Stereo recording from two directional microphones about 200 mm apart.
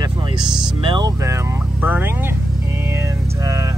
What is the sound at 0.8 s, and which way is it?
Speech, 20° right (ahead or behind).